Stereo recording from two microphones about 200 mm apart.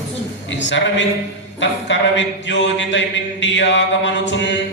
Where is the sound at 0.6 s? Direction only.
65° left (ahead or behind).